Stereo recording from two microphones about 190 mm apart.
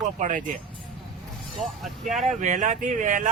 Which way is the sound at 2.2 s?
40° right (ahead or behind).